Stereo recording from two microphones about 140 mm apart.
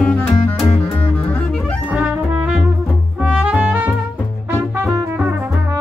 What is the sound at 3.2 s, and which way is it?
Music, 10° right (ahead or behind).